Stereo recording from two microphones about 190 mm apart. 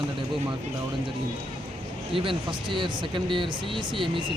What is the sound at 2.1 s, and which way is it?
Speech, 25° right (ahead or behind).